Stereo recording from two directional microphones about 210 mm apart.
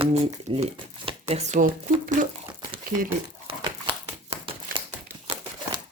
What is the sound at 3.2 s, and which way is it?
Crumpling, 20° right (ahead or behind).